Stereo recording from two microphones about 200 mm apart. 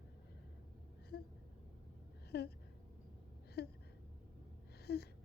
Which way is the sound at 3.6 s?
55° left (ahead or behind).